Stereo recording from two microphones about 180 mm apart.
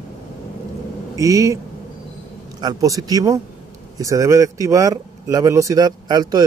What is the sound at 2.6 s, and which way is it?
Speech, 20° right (ahead or behind).